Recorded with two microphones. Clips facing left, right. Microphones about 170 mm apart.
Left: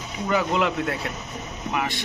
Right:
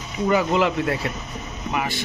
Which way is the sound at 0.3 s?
Centre (ahead or behind).